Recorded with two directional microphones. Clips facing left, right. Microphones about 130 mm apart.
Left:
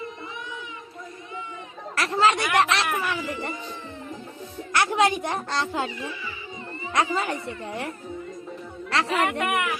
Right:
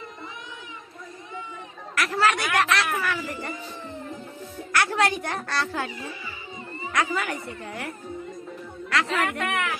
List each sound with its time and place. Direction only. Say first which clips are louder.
2.0 s speech: left 2 dB; 25° left (ahead or behind)
4.7 s speech: left 2 dB; 20° left (ahead or behind)
6.9 s speech: left 2 dB; 25° left (ahead or behind)
8.9 s speech: left 2 dB; 30° left (ahead or behind)
9.5 s speech: left 2 dB; 15° left (ahead or behind)